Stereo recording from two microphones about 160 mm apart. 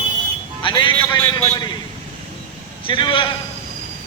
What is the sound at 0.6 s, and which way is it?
Speech, 30° left (ahead or behind).